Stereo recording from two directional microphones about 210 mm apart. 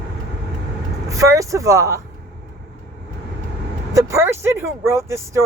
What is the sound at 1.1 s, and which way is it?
Speech, 15° right (ahead or behind).